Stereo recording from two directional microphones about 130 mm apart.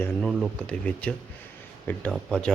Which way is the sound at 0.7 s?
10° left (ahead or behind).